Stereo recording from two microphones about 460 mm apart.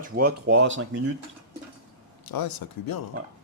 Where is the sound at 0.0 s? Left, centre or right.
Centre.